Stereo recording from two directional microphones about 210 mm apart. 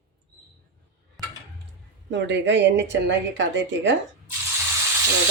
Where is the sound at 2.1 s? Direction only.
55° right (ahead or behind).